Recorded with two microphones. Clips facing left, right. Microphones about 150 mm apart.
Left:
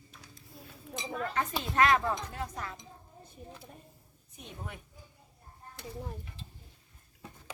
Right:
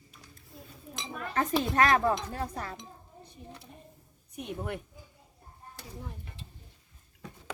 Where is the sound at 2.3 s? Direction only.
35° right (ahead or behind).